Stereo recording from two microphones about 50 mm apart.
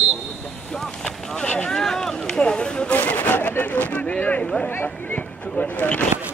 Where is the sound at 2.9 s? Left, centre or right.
Left.